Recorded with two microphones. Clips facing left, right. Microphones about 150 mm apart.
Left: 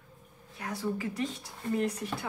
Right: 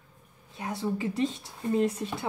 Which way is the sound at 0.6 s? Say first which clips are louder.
Right 3 dB; 25° right (ahead or behind).